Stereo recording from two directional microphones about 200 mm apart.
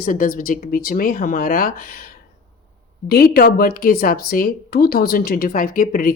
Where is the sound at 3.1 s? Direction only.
50° left (ahead or behind).